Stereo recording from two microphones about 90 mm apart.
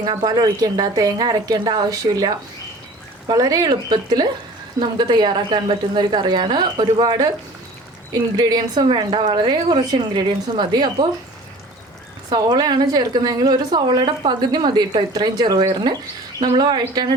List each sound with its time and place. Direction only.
0.0 s a woman's voice: 55° right (ahead or behind)
12.3 s a woman's voice: 50° right (ahead or behind)